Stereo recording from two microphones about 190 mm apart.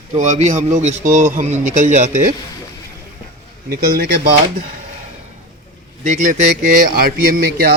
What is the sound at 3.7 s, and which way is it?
Speech, 50° right (ahead or behind).